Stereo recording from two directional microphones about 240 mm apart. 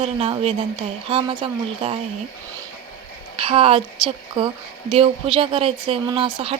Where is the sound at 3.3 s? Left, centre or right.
Right.